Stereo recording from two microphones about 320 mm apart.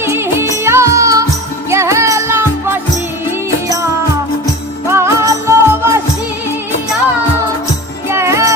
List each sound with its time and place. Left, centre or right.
0.0 s music: centre
4.9 s music: centre
8.1 s music: centre